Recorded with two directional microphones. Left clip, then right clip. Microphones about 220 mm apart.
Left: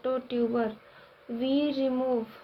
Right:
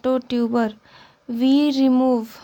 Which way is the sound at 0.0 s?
50° right (ahead or behind).